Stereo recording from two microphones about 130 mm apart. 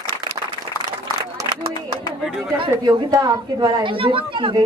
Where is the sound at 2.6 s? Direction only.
35° right (ahead or behind).